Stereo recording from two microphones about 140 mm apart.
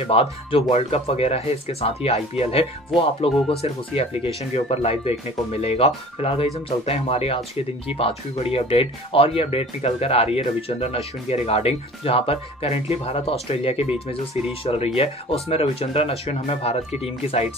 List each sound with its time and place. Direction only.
0.0 s speech: 45° left (ahead or behind)